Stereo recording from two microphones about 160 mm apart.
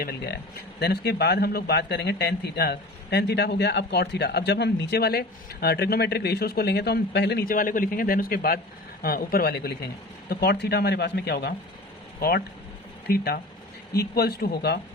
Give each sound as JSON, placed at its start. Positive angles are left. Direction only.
{"t": 0.0, "sound": "speech", "side_deg": 80}
{"t": 13.1, "sound": "speech", "side_deg": 75}